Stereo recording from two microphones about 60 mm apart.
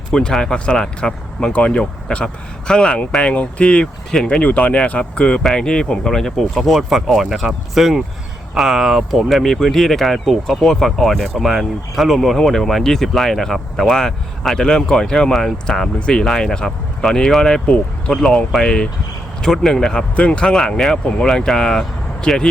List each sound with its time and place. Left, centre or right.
0.1 s speech: centre
4.4 s speech: left; by 15.9 s centre
16.0 s speech: centre